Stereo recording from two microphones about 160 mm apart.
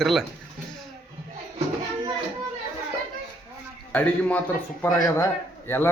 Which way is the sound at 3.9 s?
10° left (ahead or behind).